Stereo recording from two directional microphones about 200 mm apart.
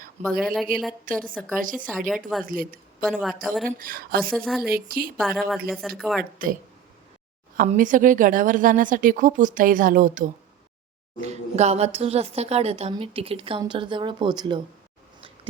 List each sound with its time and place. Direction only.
0.3 s a woman's voice: centre (ahead or behind)
1.0 s speech: 45° right (ahead or behind)
1.9 s a woman's voice: centre (ahead or behind)
2.4 s speech: 45° right (ahead or behind)
3.0 s a woman's voice: 5° left (ahead or behind)
3.8 s speech: 45° right (ahead or behind)
4.4 s a woman's voice: centre (ahead or behind)
4.7 s speech: 50° right (ahead or behind)
5.1 s a woman's voice: centre (ahead or behind)
7.5 s speech: 40° right (ahead or behind); by 14.6 s 20° right (ahead or behind)